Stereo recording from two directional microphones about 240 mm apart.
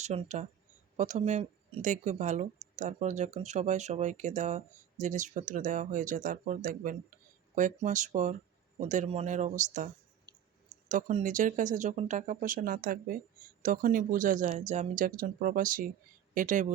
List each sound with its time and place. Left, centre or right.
0.0 s speech: right